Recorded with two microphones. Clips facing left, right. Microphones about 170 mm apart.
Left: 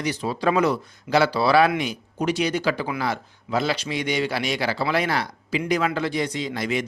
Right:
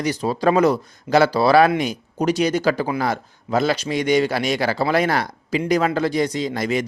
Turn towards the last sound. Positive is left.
turn(degrees=-40)  # may be behind; listen again after turning